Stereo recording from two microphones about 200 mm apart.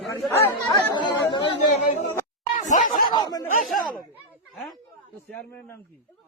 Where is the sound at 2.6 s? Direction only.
40° left (ahead or behind).